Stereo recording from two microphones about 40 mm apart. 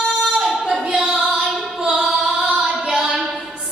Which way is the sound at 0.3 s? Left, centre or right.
Centre.